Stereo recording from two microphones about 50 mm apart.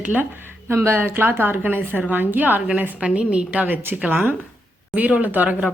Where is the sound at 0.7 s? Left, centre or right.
Right.